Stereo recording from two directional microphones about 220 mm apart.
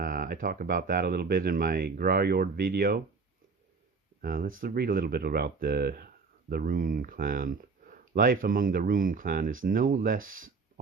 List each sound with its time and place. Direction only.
0.0 s speech: 40° right (ahead or behind)
4.2 s speech: 40° right (ahead or behind)